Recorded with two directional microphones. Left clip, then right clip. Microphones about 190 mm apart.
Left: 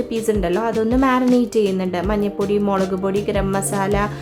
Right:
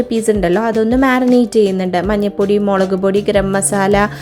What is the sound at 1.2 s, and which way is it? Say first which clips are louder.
Speech: right 5 dB; centre (ahead or behind).